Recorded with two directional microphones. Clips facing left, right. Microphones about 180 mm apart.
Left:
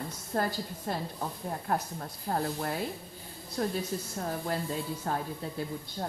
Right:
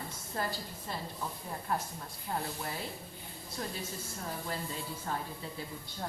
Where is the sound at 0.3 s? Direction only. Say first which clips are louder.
Left 6 dB; 55° left (ahead or behind).